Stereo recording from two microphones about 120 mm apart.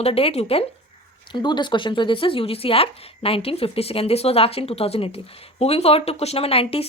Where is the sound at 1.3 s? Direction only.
40° left (ahead or behind).